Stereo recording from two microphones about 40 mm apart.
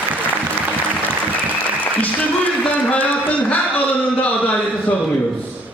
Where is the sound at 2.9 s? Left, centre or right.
Left.